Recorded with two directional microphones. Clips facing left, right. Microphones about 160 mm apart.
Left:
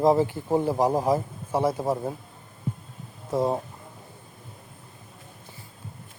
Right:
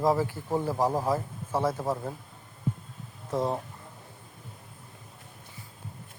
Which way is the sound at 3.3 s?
10° left (ahead or behind).